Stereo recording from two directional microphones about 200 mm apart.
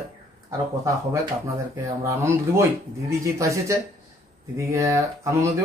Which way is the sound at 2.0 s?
15° right (ahead or behind).